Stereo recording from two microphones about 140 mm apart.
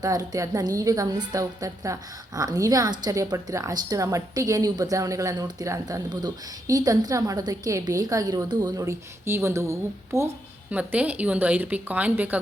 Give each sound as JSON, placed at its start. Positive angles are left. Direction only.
{"t": 0.0, "sound": "a woman's voice", "side_deg": -25}